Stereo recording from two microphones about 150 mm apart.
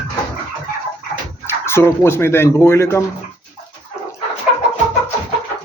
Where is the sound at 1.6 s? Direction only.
15° left (ahead or behind).